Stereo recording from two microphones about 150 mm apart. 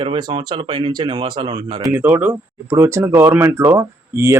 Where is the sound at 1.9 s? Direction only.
15° right (ahead or behind).